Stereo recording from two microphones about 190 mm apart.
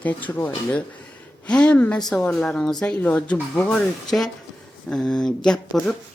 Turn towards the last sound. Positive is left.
turn(degrees=0)  # may be behind; listen again after turning